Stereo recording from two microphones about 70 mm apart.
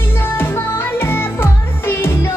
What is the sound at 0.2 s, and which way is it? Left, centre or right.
Music, left.